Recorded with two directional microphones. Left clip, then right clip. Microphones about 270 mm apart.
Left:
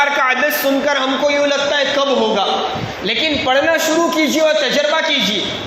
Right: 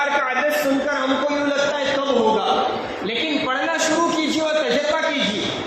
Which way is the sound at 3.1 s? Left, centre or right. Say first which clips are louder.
Left 7 dB; left.